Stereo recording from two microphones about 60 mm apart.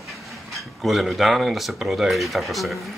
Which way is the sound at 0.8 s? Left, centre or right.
Centre.